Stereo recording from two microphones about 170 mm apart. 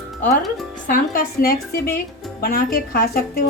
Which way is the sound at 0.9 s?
55° left (ahead or behind).